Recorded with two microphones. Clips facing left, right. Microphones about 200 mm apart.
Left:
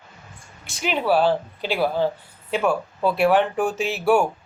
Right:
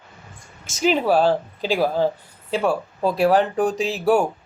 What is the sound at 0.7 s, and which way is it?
Speech, 40° right (ahead or behind).